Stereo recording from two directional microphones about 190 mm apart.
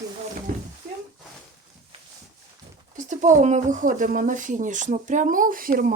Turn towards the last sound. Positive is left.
turn(degrees=-45)  # may be behind; listen again after turning